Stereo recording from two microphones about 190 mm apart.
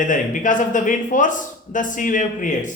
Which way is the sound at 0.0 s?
45° left (ahead or behind).